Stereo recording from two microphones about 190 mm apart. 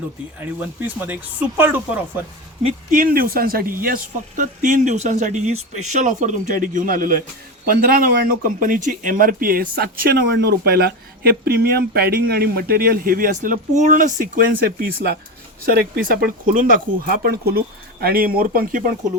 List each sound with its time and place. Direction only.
0.3 s speech: 10° right (ahead or behind)
2.9 s speech: 50° right (ahead or behind)